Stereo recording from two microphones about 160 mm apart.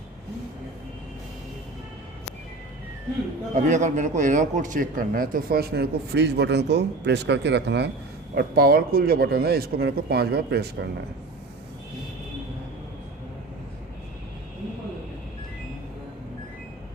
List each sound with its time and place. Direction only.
3.5 s a man's voice: 50° right (ahead or behind); by 7.9 s 90° right
8.4 s a man's voice: 75° right (ahead or behind)